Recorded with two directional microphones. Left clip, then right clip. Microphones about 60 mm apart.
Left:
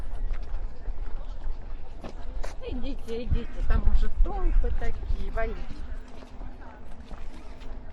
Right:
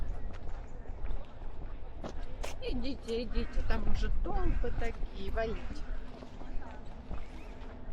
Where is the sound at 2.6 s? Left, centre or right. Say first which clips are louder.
Left 1 dB; centre.